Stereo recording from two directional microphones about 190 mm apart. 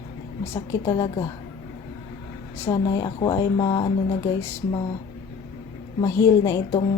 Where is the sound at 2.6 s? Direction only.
20° left (ahead or behind).